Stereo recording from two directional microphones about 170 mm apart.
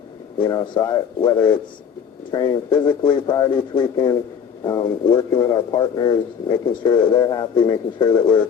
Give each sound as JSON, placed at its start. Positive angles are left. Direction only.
{"t": 0.3, "sound": "speech", "side_deg": 25}